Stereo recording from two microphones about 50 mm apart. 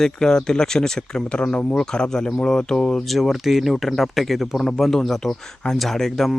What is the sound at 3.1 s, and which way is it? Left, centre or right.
Speech, centre.